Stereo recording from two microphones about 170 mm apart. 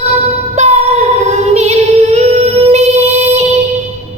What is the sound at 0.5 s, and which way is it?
Singing, 40° right (ahead or behind).